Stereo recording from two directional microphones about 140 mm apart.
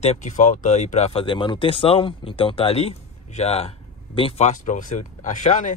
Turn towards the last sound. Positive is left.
turn(degrees=60)  # may be behind; listen again after turning